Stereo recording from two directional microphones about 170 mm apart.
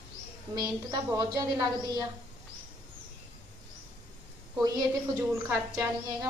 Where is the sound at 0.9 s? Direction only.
20° right (ahead or behind).